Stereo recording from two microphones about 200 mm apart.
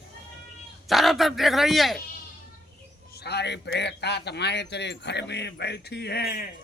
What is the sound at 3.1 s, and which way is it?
Speech, 55° left (ahead or behind).